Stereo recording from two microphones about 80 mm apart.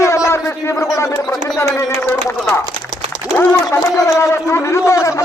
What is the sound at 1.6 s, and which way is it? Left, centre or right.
A man's voice, left.